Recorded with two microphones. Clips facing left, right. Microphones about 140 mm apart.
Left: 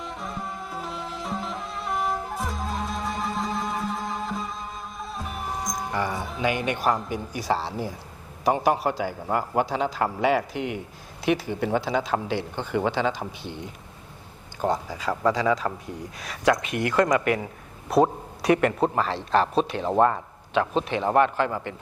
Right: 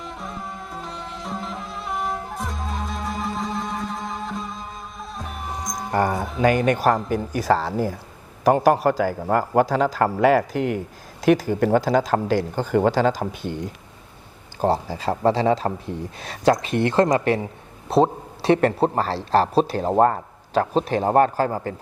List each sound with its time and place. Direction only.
0.0 s music: centre (ahead or behind)
5.9 s speech: 50° right (ahead or behind)
14.6 s speech: 30° right (ahead or behind)